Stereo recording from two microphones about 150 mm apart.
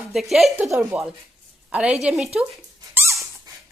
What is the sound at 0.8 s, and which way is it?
A woman's voice, 5° right (ahead or behind).